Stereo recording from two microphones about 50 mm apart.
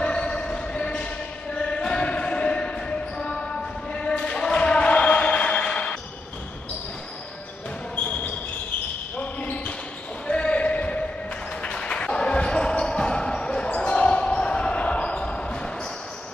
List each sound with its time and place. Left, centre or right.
0.0 s basketball bounce: left
3.9 s chant: left
9.2 s basketball bounce: left